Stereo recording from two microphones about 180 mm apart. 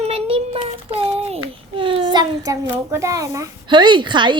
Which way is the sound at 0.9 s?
35° right (ahead or behind).